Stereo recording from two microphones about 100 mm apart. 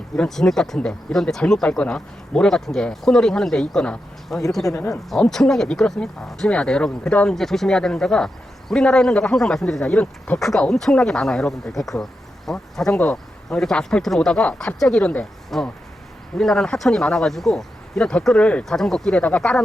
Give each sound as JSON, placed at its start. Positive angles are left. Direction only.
{"t": 0.2, "sound": "speech", "side_deg": 5}
{"t": 4.6, "sound": "speech", "side_deg": 30}
{"t": 5.0, "sound": "speech", "side_deg": 5}